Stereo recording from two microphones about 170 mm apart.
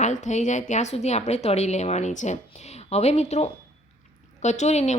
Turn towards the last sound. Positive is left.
turn(degrees=40)  # may be behind; listen again after turning